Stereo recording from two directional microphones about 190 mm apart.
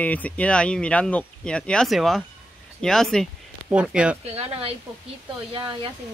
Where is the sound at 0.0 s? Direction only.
10° left (ahead or behind).